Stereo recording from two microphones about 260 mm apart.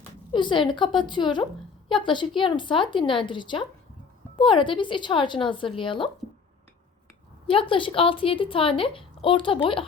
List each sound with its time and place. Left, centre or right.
0.3 s a woman's voice: centre
7.4 s a woman's voice: left